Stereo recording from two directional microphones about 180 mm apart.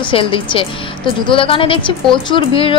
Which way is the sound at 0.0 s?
30° left (ahead or behind).